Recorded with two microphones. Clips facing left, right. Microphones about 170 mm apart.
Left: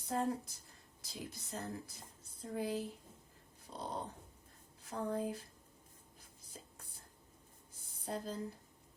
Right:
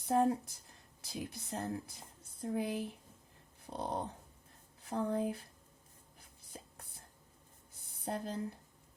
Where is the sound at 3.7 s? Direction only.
55° right (ahead or behind).